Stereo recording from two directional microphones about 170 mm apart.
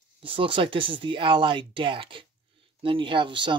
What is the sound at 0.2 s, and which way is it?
Speech, 30° right (ahead or behind).